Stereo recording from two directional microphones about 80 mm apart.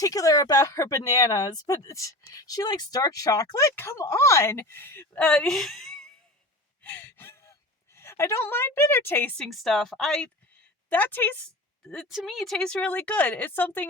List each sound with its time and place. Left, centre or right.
0.0 s speech: left
3.8 s speech: left
5.1 s speech: centre
6.8 s gasp: left
7.9 s a woman's voice: left
9.4 s a woman's voice: centre
10.8 s a woman's voice: left
11.9 s speech: centre; by 13.8 s left